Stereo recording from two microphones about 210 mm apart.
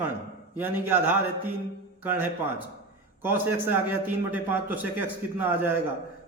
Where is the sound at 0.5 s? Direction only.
10° right (ahead or behind).